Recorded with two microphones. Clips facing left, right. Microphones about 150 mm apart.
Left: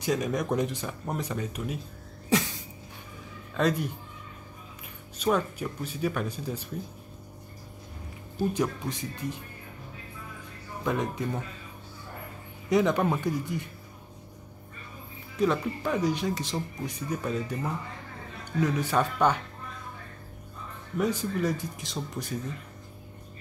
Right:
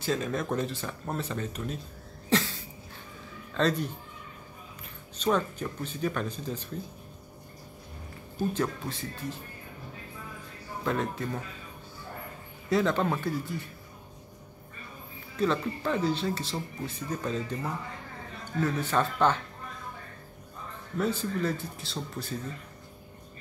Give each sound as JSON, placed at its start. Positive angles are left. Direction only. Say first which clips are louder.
{"t": 0.0, "sound": "speech", "louder": "left 2 dB", "side_deg": 15}
{"t": 2.2, "sound": "a sound", "louder": "left 1 dB", "side_deg": 10}
{"t": 3.5, "sound": "speech", "louder": "left 1 dB", "side_deg": 10}
{"t": 5.1, "sound": "speech", "louder": "left 1 dB", "side_deg": 10}
{"t": 8.4, "sound": "speech", "louder": "left 2 dB", "side_deg": 15}
{"t": 10.8, "sound": "speech", "louder": "left 1 dB", "side_deg": 15}
{"t": 12.6, "sound": "speech", "louder": "left 2 dB", "side_deg": 15}
{"t": 15.3, "sound": "speech", "louder": "left 2 dB", "side_deg": 10}
{"t": 21.0, "sound": "speech", "louder": "left 1 dB", "side_deg": 15}